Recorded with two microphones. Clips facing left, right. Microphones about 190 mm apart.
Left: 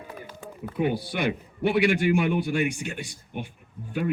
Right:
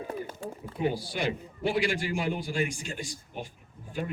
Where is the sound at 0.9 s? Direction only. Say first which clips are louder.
Left 4 dB; 60° left (ahead or behind).